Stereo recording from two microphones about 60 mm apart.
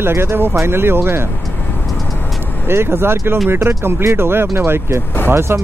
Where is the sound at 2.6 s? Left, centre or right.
Right.